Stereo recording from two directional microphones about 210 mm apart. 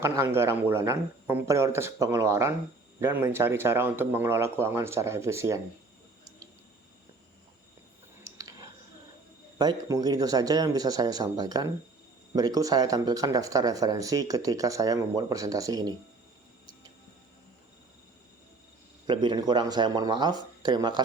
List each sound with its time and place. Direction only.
0.0 s speech: 10° right (ahead or behind)
8.4 s a sound: 20° right (ahead or behind)
9.6 s speech: 20° right (ahead or behind)
19.0 s speech: 20° right (ahead or behind)